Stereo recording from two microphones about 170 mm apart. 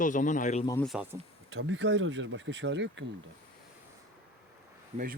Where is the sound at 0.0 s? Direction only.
50° left (ahead or behind).